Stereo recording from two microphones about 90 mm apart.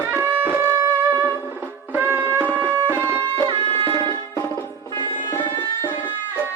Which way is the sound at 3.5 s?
80° right.